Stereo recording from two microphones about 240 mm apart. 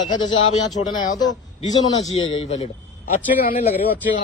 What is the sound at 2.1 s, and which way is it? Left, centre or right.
Speech, left.